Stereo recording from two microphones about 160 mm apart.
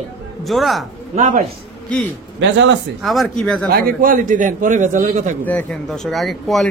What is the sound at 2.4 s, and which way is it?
Speech, 90° right.